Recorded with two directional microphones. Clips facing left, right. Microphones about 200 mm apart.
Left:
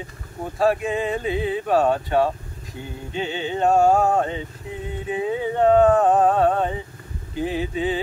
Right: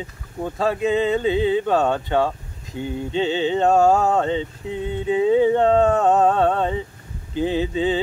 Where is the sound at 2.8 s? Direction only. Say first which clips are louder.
Right 6 dB; 25° right (ahead or behind).